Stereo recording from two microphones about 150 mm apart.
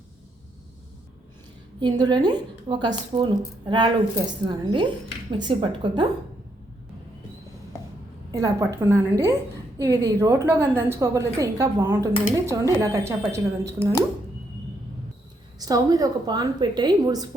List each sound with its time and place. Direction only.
1.8 s a woman's voice: 30° right (ahead or behind)
8.3 s a woman's voice: 25° right (ahead or behind)
15.5 s a woman's voice: 25° right (ahead or behind)